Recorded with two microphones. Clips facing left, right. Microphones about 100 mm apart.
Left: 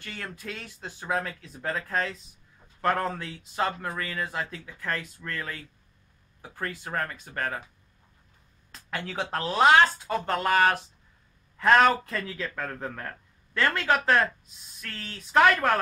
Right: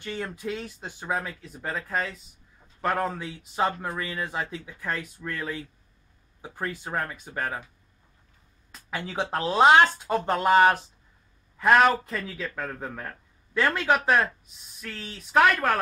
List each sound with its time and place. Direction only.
0.0 s speech: 20° right (ahead or behind)
8.7 s a sound: 10° right (ahead or behind)
9.1 s speech: 20° right (ahead or behind)
11.5 s a man's voice: 5° right (ahead or behind)